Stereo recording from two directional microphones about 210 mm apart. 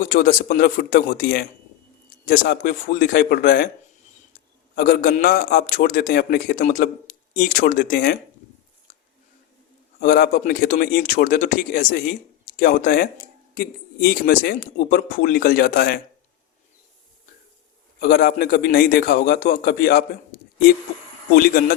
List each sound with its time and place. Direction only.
0.1 s a man's voice: 45° left (ahead or behind)
4.7 s a man's voice: 40° left (ahead or behind)
10.0 s a man's voice: 45° left (ahead or behind)
18.0 s a man's voice: 45° left (ahead or behind)
21.3 s a man's voice: 45° left (ahead or behind)